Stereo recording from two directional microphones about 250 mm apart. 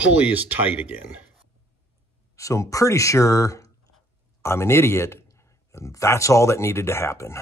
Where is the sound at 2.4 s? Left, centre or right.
Centre.